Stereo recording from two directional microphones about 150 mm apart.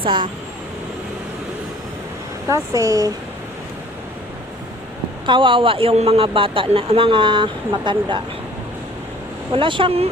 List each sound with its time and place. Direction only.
0.0 s a man's voice: 35° right (ahead or behind)
2.5 s speech: 20° right (ahead or behind)
5.2 s a man's voice: 35° right (ahead or behind)
9.5 s a man's voice: 35° right (ahead or behind)